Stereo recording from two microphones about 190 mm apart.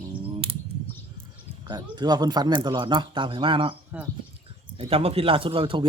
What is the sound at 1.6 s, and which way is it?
Speech, 20° right (ahead or behind).